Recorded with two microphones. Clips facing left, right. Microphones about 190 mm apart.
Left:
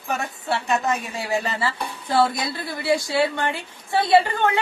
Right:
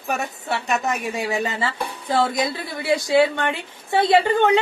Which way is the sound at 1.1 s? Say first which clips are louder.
Right 1 dB; 20° right (ahead or behind).